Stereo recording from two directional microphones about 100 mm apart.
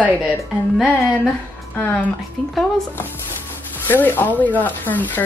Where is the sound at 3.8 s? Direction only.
20° left (ahead or behind).